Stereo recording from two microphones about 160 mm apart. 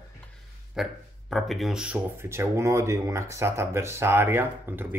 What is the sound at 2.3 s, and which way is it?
Speech, 20° right (ahead or behind).